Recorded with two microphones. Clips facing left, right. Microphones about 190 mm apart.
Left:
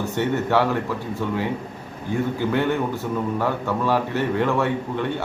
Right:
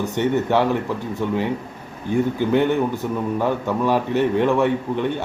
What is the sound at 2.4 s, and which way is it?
A man's voice, 20° right (ahead or behind).